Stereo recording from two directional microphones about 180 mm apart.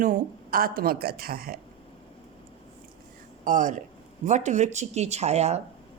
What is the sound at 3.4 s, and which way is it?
A woman's voice, 45° right (ahead or behind).